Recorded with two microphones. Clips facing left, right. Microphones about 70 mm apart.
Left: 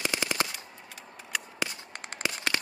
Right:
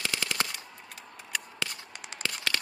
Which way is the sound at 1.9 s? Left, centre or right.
Left.